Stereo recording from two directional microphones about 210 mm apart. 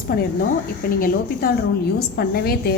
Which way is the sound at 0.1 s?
45° left (ahead or behind).